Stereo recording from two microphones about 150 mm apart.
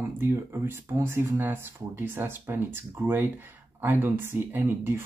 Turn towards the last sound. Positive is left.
turn(degrees=-15)  # may be behind; listen again after turning